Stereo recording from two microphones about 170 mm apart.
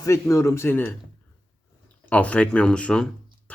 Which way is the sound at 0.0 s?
15° left (ahead or behind).